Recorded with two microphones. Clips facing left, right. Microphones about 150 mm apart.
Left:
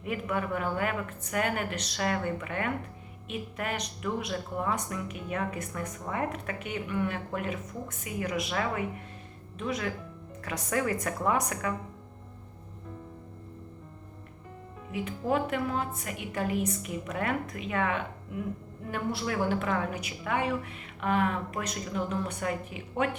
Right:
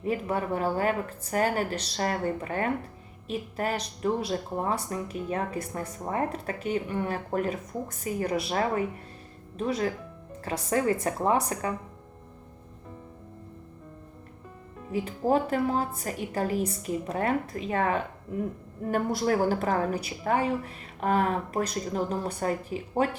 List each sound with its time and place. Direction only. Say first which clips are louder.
0.0 s speech: right 3 dB; 30° right (ahead or behind)
14.9 s speech: right 4 dB; 35° right (ahead or behind)